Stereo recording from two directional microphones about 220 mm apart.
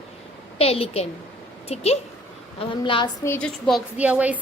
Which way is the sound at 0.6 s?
25° left (ahead or behind).